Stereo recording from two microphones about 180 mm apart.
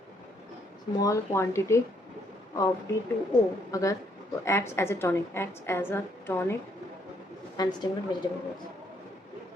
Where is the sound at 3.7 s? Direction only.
20° left (ahead or behind).